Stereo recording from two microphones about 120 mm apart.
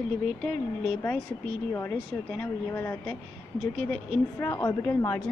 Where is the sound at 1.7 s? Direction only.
20° left (ahead or behind).